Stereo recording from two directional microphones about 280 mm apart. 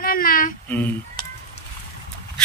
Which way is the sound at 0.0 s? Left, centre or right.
Left.